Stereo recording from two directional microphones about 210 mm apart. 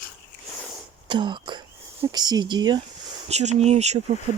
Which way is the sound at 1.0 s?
20° right (ahead or behind).